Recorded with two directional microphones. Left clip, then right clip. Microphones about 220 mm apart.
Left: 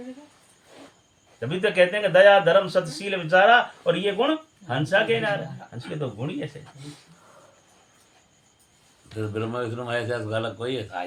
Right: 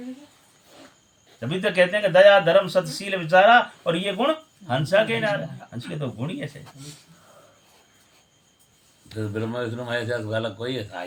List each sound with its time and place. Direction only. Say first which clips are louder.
1.4 s speech: even; 10° left (ahead or behind)
9.0 s a man's voice: even; centre (ahead or behind)